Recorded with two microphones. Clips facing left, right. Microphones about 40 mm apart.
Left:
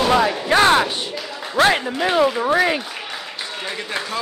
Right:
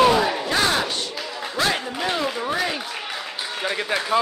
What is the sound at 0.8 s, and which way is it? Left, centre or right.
Clapping, left.